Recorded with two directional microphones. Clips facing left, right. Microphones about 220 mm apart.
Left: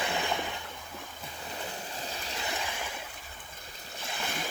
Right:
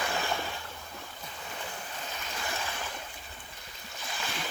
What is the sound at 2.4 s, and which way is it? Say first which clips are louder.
Ocean: even; 15° left (ahead or behind).